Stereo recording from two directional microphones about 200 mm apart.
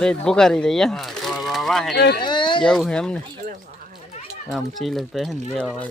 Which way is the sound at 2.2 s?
20° left (ahead or behind).